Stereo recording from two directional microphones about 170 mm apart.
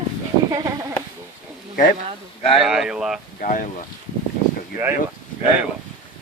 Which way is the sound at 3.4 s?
50° left (ahead or behind).